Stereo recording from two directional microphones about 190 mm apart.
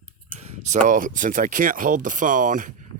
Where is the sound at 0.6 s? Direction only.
40° right (ahead or behind).